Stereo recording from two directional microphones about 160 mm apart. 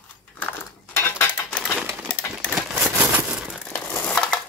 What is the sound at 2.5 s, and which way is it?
Crumpling, 5° right (ahead or behind).